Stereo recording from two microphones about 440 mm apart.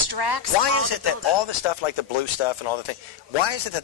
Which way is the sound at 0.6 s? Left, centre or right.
Left.